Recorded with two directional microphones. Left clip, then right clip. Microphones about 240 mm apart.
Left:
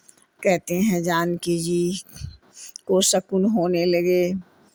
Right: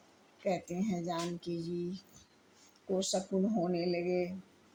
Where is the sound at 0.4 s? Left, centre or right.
Left.